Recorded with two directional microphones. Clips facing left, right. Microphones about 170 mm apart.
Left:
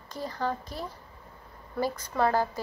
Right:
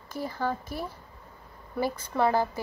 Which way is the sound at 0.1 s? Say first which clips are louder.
Right 1 dB; 10° right (ahead or behind).